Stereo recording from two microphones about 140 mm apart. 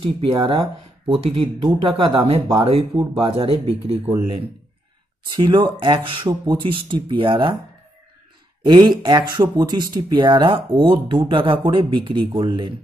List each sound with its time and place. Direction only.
0.0 s speech: 40° right (ahead or behind)
5.3 s speech: 35° right (ahead or behind)
8.6 s speech: 30° right (ahead or behind)